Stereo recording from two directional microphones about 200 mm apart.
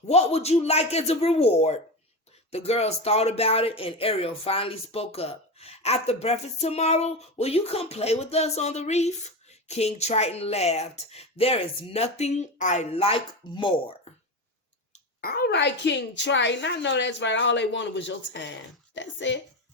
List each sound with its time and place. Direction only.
0.1 s speech: 30° left (ahead or behind)
14.9 s speech: 45° left (ahead or behind); by 19.4 s 65° left (ahead or behind)